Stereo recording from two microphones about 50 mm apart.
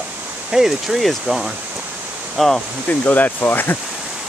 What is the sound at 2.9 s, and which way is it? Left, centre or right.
Speech, left.